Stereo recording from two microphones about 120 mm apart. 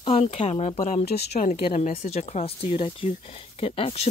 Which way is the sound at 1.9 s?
60° left (ahead or behind).